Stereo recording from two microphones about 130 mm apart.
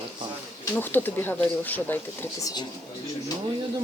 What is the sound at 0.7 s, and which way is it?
A woman's voice, 15° left (ahead or behind).